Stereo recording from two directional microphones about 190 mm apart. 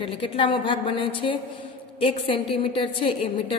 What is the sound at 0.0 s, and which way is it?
A woman's voice, 25° left (ahead or behind).